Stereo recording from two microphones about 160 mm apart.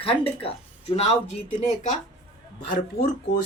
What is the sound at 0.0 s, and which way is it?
Speech, 35° left (ahead or behind).